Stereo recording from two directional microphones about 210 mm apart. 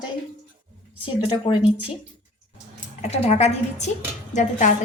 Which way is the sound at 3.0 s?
30° left (ahead or behind).